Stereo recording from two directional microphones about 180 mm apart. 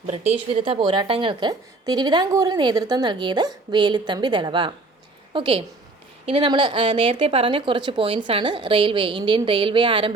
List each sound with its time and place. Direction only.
0.5 s a woman's voice: 30° right (ahead or behind)